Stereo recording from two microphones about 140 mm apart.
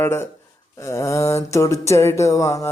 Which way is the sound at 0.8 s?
20° left (ahead or behind).